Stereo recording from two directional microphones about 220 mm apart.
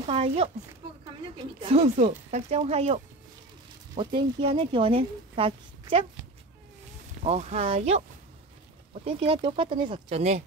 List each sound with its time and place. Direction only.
0.0 s speech: 25° right (ahead or behind)
1.6 s speech: 25° right (ahead or behind)
7.2 s speech: 30° right (ahead or behind)
9.0 s speech: 25° right (ahead or behind)